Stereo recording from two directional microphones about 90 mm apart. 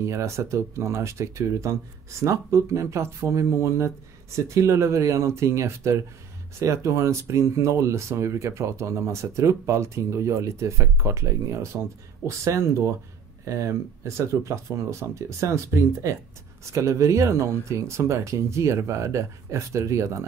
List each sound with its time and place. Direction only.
0.0 s speech: 35° right (ahead or behind)